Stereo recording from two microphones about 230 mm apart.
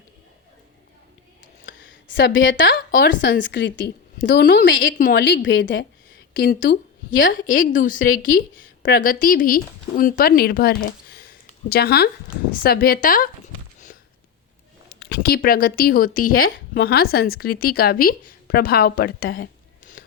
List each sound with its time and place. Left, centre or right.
1.6 s a sound: left
3.4 s a woman's voice: left
6.3 s a woman's voice: left
14.9 s a woman's voice: left